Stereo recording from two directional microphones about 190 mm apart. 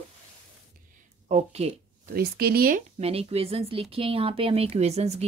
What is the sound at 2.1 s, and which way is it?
Speech, 55° right (ahead or behind).